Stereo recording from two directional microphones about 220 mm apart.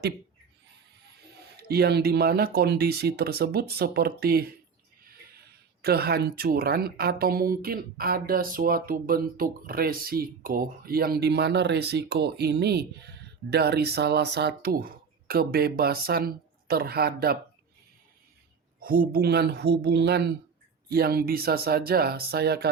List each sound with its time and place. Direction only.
1.6 s speech: 45° right (ahead or behind)
18.8 s speech: 40° right (ahead or behind)